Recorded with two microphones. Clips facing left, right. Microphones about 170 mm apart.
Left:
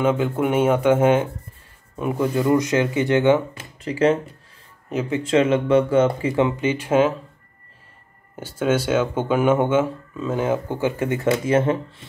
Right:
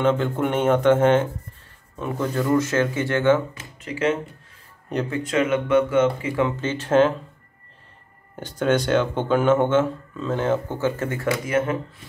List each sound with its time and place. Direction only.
0.0 s speech: 10° left (ahead or behind)
3.8 s speech: 35° left (ahead or behind)
6.6 s speech: 10° left (ahead or behind)
8.4 s speech: 5° left (ahead or behind); by 12.1 s 30° left (ahead or behind)